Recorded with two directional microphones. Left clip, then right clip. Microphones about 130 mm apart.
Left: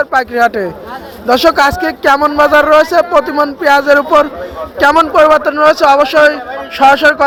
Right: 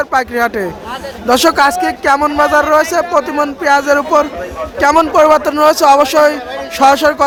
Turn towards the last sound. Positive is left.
turn(degrees=-25)  # may be behind; listen again after turning